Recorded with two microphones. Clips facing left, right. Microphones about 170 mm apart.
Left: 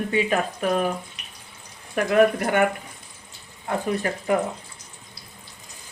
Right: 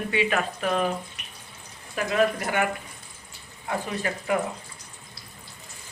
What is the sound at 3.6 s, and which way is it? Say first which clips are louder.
Speech: left 4 dB; 40° left (ahead or behind).